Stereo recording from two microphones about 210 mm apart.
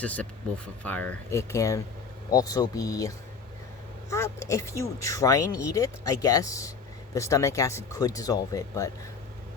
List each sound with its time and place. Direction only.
0.0 s speech: 5° left (ahead or behind)
4.1 s speech: 15° left (ahead or behind)